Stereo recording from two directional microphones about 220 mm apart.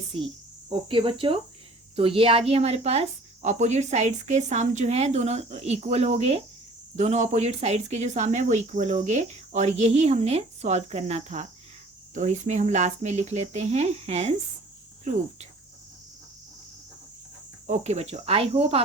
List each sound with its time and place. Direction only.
0.7 s cricket: 25° right (ahead or behind)
2.5 s speech: 30° right (ahead or behind)
17.7 s cricket: 30° right (ahead or behind)